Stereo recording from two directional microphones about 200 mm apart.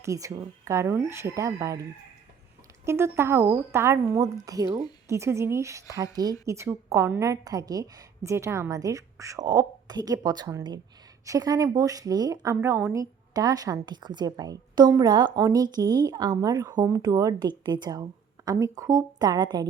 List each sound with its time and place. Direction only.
0.0 s a woman's voice: 15° right (ahead or behind)
2.8 s a woman's voice: 10° right (ahead or behind)